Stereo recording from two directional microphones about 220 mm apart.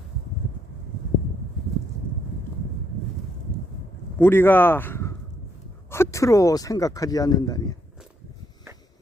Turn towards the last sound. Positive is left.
turn(degrees=15)  # may be behind; listen again after turning